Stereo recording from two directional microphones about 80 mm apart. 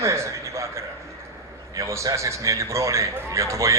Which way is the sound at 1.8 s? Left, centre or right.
Right.